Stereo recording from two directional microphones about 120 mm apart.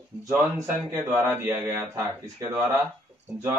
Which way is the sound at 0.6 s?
20° right (ahead or behind).